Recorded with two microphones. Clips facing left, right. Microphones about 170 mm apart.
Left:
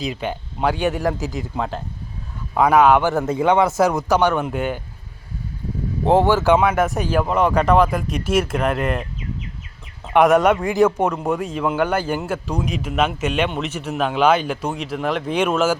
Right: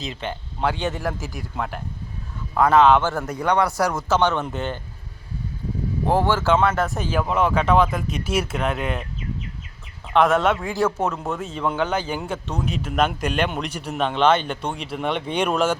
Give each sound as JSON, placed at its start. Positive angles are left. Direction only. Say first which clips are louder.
{"t": 0.0, "sound": "a man's voice", "louder": "left 5 dB", "side_deg": 15}
{"t": 2.6, "sound": "a man's voice", "louder": "left 1 dB", "side_deg": 10}
{"t": 6.1, "sound": "a man's voice", "louder": "left 5 dB", "side_deg": 20}
{"t": 8.5, "sound": "a man's voice", "louder": "left 4 dB", "side_deg": 5}
{"t": 10.1, "sound": "a man's voice", "louder": "left 4 dB", "side_deg": 15}